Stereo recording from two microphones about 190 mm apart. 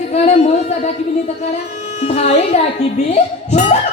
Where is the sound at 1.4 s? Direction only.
35° left (ahead or behind).